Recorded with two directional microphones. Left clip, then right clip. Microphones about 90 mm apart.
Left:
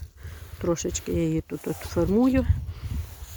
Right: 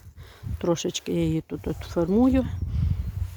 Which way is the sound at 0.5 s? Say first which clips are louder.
Right 1 dB; 40° right (ahead or behind).